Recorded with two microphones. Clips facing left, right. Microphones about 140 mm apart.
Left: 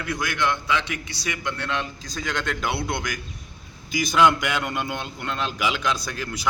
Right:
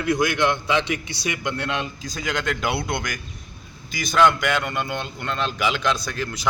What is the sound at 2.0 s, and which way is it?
Speech, 5° right (ahead or behind).